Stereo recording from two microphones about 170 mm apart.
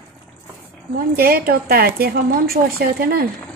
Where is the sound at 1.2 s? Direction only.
60° right (ahead or behind).